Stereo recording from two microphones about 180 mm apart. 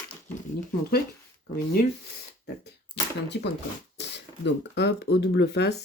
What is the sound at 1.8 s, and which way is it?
Speech, 55° left (ahead or behind).